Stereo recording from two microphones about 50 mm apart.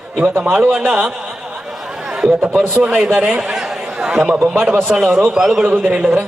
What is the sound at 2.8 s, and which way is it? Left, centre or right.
Speech, right.